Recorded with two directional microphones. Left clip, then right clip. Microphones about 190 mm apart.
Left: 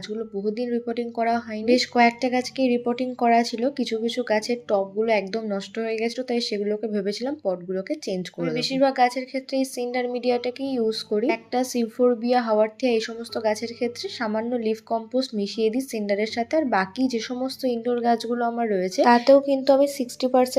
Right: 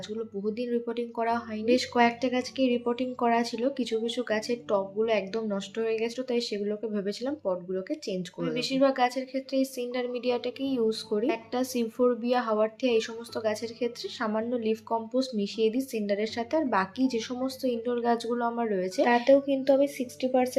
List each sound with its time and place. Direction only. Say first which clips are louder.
0.4 s speech: left 4 dB; 15° left (ahead or behind)
19.2 s speech: left 5 dB; 35° left (ahead or behind)